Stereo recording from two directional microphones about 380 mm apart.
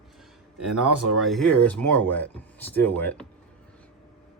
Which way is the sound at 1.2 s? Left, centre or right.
Centre.